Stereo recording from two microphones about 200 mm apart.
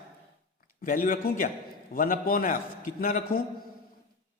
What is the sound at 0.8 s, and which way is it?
A man's voice, 45° left (ahead or behind).